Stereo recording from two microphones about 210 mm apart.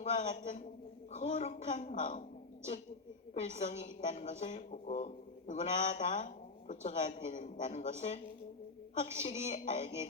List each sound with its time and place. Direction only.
0.0 s a woman's voice: 35° left (ahead or behind)
3.6 s a woman's voice: 35° left (ahead or behind)
9.2 s a woman's voice: 35° left (ahead or behind)